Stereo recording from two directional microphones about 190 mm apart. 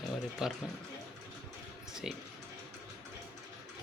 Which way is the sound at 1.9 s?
5° right (ahead or behind).